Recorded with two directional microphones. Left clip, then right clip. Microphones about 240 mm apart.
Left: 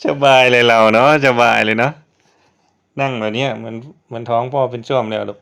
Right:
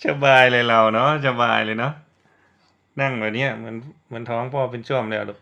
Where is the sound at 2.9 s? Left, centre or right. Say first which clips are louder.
Left 4 dB; left.